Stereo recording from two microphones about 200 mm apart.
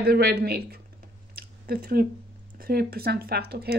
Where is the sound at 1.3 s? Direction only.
50° right (ahead or behind).